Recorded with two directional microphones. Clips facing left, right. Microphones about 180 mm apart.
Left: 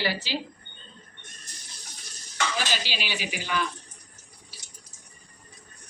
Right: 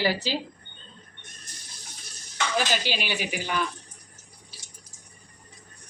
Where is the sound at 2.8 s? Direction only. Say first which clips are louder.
Right 4 dB; 50° right (ahead or behind).